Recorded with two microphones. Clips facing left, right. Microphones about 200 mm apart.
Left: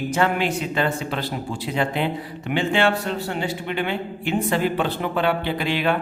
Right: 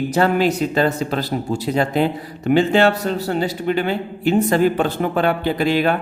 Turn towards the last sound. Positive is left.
turn(degrees=-45)  # may be behind; listen again after turning